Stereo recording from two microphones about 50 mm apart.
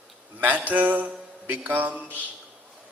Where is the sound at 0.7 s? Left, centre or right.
Right.